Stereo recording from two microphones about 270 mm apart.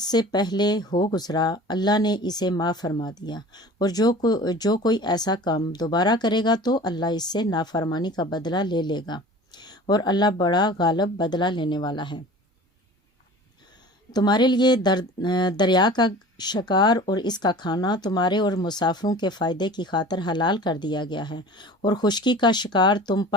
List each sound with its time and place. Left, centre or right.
0.0 s speech: centre
14.1 s speech: centre